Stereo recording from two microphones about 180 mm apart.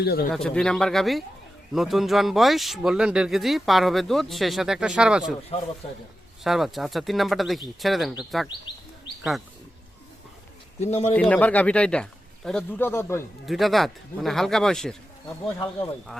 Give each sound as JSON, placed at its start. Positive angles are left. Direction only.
{"t": 0.0, "sound": "speech", "side_deg": 60}
{"t": 0.3, "sound": "speech", "side_deg": 5}
{"t": 6.4, "sound": "speech", "side_deg": 0}
{"t": 10.8, "sound": "a man's voice", "side_deg": 35}
{"t": 11.1, "sound": "speech", "side_deg": 10}
{"t": 13.4, "sound": "speech", "side_deg": 0}
{"t": 15.5, "sound": "speech", "side_deg": 15}